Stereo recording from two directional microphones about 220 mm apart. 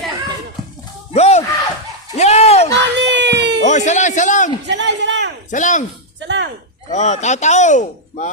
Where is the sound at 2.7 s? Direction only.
55° right (ahead or behind).